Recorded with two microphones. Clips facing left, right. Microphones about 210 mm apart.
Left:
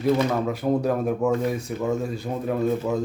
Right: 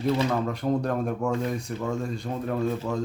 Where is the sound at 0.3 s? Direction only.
5° left (ahead or behind).